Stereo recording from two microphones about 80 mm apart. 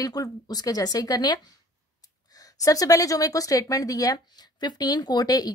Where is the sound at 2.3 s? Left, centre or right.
Left.